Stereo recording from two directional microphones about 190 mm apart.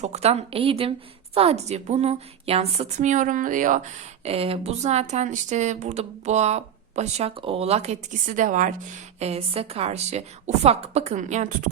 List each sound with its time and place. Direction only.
0.0 s speech: 35° right (ahead or behind)
4.2 s speech: 30° right (ahead or behind)